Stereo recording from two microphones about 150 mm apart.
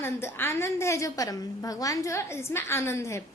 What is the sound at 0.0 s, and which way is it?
A woman's voice, 15° left (ahead or behind).